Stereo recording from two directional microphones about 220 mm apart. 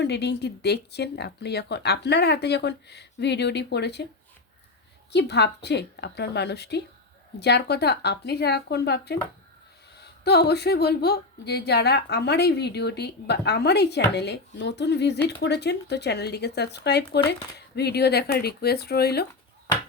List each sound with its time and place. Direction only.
0.0 s a woman's voice: 50° left (ahead or behind)
5.1 s a woman's voice: 50° left (ahead or behind)